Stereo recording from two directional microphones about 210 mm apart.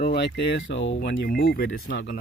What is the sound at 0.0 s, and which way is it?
Speech, 50° left (ahead or behind).